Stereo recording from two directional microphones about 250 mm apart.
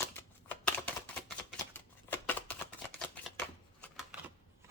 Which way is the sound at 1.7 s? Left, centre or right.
Centre.